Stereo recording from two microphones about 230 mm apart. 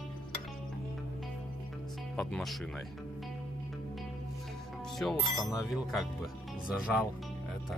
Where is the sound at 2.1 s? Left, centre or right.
Centre.